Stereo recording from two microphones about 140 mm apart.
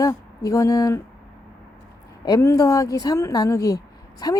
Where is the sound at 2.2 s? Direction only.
25° left (ahead or behind).